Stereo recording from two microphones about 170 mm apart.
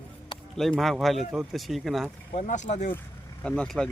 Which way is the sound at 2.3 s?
45° left (ahead or behind).